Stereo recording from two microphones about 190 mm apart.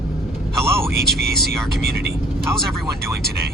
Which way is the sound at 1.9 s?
55° right (ahead or behind).